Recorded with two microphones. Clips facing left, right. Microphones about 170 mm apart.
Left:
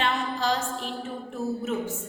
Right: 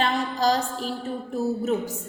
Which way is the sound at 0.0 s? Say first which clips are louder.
Right 4 dB; 40° right (ahead or behind).